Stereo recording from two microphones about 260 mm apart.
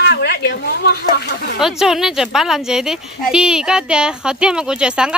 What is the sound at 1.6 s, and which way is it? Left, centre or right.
Speech, centre.